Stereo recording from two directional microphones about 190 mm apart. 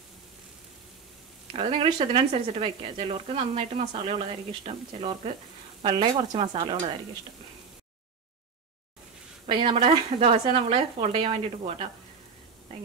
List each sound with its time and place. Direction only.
1.5 s a woman's voice: 30° right (ahead or behind)
9.5 s a woman's voice: 25° right (ahead or behind)